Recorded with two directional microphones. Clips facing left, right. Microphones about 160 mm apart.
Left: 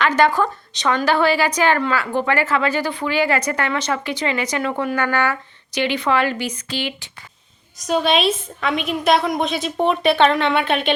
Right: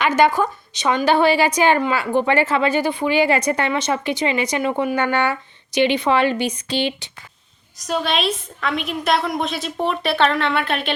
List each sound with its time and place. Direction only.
0.1 s speech: 20° right (ahead or behind)
7.8 s a woman's voice: centre (ahead or behind)